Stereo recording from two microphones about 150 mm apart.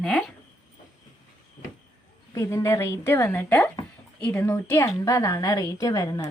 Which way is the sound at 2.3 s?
20° left (ahead or behind).